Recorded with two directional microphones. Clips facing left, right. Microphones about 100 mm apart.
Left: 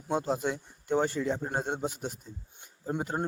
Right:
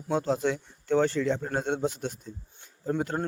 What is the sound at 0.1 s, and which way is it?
A man's voice, 5° left (ahead or behind).